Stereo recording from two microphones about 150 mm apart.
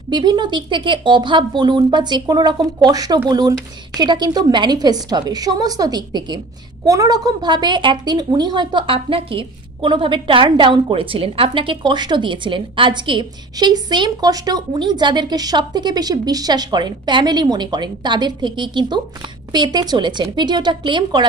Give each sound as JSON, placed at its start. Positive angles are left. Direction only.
{"t": 0.1, "sound": "a woman's voice", "side_deg": -30}